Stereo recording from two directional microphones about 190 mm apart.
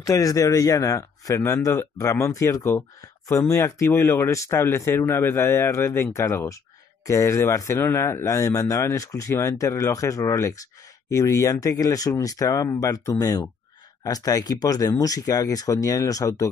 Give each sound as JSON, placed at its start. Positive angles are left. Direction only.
{"t": 0.0, "sound": "speech", "side_deg": 15}